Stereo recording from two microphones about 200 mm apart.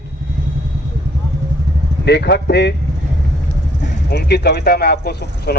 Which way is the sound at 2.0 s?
55° left (ahead or behind).